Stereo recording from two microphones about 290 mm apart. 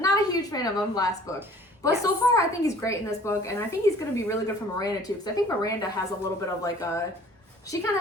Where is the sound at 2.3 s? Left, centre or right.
Centre.